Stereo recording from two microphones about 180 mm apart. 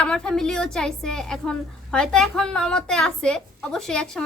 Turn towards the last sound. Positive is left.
turn(degrees=5)  # may be behind; listen again after turning